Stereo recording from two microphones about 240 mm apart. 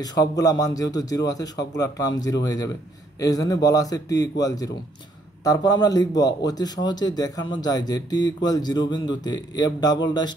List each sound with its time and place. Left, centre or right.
0.0 s a man's voice: centre